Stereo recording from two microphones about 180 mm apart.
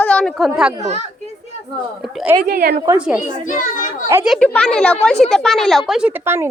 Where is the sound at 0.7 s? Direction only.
40° right (ahead or behind).